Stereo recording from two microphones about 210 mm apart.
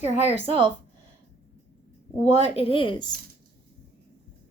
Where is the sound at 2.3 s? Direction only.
30° left (ahead or behind).